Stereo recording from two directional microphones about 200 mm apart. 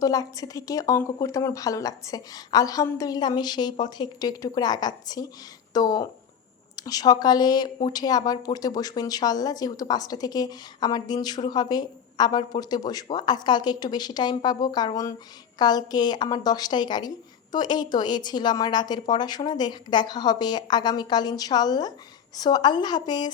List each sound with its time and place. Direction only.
0.0 s speech: 20° left (ahead or behind)